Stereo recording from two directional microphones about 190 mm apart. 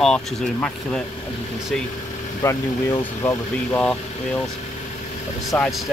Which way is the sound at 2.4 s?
15° left (ahead or behind).